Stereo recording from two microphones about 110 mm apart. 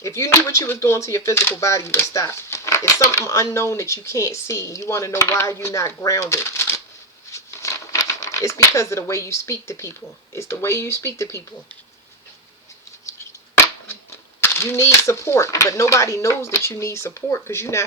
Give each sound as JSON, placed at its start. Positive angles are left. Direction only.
{"t": 0.0, "sound": "speech", "side_deg": 30}
{"t": 7.3, "sound": "crumpling", "side_deg": 30}
{"t": 10.3, "sound": "speech", "side_deg": 25}
{"t": 14.4, "sound": "speech", "side_deg": 25}